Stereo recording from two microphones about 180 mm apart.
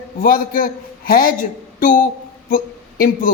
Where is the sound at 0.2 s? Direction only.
50° left (ahead or behind).